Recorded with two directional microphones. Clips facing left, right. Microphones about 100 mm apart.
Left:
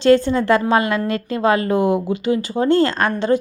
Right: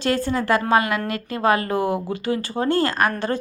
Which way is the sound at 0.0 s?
25° left (ahead or behind).